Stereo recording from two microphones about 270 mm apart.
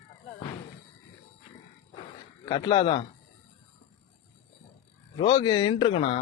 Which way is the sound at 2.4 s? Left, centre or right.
Centre.